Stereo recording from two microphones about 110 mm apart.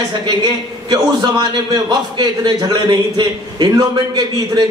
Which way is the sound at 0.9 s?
40° right (ahead or behind).